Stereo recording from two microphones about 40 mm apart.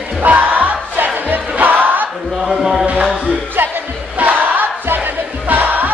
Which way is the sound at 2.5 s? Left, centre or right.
Centre.